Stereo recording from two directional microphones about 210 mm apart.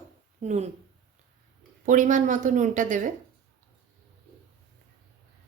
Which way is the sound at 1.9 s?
35° right (ahead or behind).